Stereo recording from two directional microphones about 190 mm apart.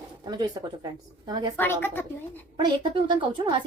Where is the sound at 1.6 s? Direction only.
10° left (ahead or behind).